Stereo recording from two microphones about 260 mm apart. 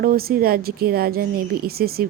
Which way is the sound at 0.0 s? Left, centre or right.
Right.